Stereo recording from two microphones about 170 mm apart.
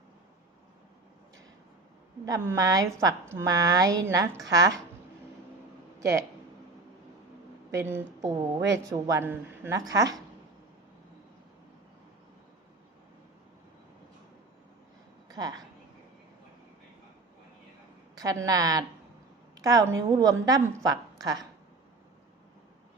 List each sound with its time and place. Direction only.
2.2 s a woman's voice: 15° right (ahead or behind)
7.7 s a man's voice: 15° right (ahead or behind)
15.3 s speech: 20° right (ahead or behind)
18.2 s a woman's voice: 20° right (ahead or behind)